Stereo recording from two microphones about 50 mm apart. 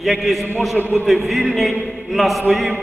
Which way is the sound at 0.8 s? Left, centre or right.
Right.